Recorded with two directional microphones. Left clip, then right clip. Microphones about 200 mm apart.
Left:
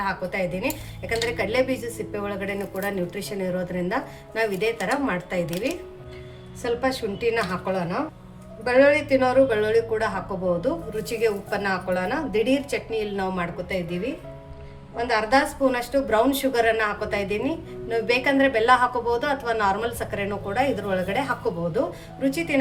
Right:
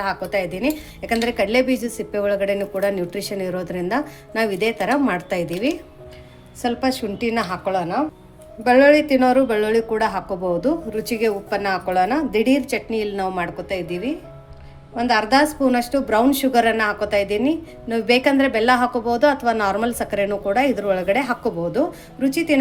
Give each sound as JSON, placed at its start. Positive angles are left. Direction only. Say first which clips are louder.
{"t": 0.0, "sound": "a woman's voice", "louder": "right 4 dB", "side_deg": -40}
{"t": 6.6, "sound": "a woman's voice", "louder": "right 3 dB", "side_deg": -45}